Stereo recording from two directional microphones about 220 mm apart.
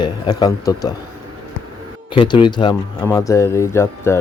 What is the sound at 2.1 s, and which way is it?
Speech, 20° left (ahead or behind).